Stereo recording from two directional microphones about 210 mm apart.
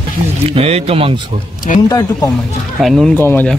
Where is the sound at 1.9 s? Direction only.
15° left (ahead or behind).